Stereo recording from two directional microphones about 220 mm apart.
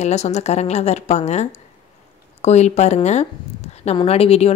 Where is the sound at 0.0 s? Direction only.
30° left (ahead or behind).